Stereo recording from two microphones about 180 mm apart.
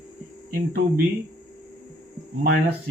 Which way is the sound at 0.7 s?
55° right (ahead or behind).